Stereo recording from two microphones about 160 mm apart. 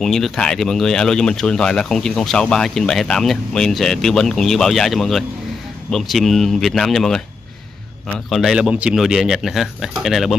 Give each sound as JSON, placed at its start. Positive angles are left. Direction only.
{"t": 0.0, "sound": "speech", "side_deg": 0}
{"t": 8.3, "sound": "speech", "side_deg": 0}